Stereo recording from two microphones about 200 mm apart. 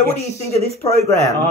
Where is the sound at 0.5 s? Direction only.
30° right (ahead or behind).